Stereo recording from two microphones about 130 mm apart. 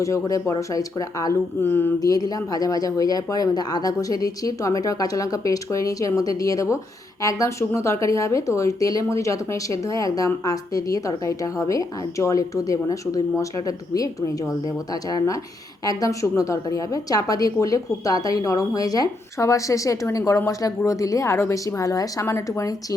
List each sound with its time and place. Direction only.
0.0 s speech: 25° left (ahead or behind)
1.6 s a sound: 15° left (ahead or behind)
2.0 s speech: 30° left (ahead or behind)
15.9 s speech: 25° left (ahead or behind)